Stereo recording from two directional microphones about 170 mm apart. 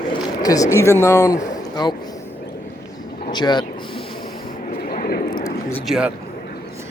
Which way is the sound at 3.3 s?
25° left (ahead or behind).